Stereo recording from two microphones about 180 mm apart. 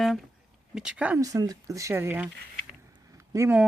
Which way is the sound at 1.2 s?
20° right (ahead or behind).